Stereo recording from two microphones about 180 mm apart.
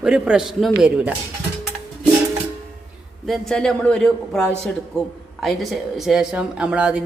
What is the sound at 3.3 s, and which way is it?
A woman's voice, 5° left (ahead or behind).